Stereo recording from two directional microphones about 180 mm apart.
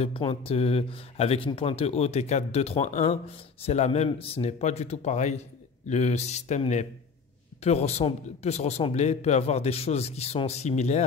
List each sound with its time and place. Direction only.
0.0 s a man's voice: 30° left (ahead or behind)